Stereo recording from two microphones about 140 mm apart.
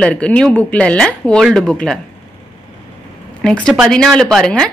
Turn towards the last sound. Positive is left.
turn(degrees=5)  # may be behind; listen again after turning